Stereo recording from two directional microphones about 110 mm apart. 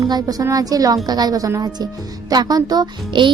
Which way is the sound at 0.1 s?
35° right (ahead or behind).